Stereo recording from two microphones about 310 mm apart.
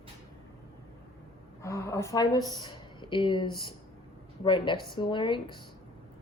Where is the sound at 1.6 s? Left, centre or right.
Centre.